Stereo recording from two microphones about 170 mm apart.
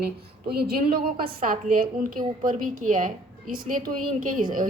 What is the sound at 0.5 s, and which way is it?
A woman's voice, 65° right (ahead or behind).